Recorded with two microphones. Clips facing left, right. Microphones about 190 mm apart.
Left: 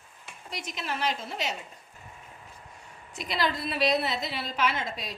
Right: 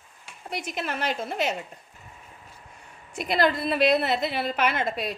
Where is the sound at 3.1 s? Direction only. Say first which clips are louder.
Right 6 dB; 55° right (ahead or behind).